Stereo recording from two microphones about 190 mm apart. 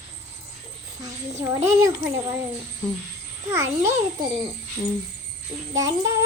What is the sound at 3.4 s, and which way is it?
Child singing, 15° right (ahead or behind).